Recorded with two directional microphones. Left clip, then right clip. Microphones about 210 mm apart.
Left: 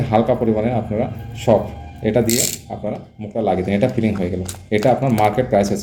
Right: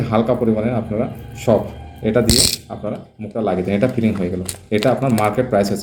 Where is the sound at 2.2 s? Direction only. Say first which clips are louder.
Right 4 dB; 25° right (ahead or behind).